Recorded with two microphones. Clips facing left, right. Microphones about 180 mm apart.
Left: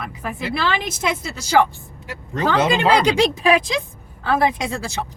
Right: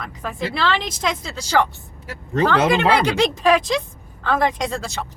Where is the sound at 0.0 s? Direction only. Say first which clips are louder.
Even; 10° left (ahead or behind).